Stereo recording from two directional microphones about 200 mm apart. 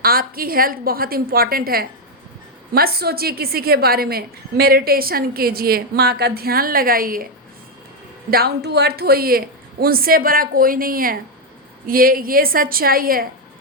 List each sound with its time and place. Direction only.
0.0 s a woman's voice: 50° right (ahead or behind)
8.3 s a woman's voice: 50° right (ahead or behind)